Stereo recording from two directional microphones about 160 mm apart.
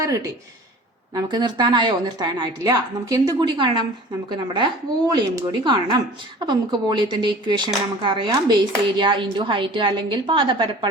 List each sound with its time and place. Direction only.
0.0 s speech: 20° right (ahead or behind)